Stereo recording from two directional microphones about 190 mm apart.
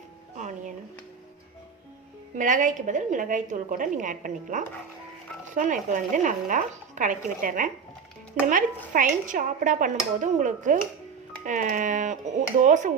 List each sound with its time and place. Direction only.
0.3 s music: 40° right (ahead or behind)
2.3 s a woman's voice: 45° right (ahead or behind)